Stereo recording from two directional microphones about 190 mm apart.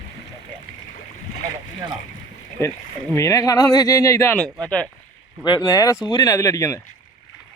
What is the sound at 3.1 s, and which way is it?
Speech, 15° left (ahead or behind).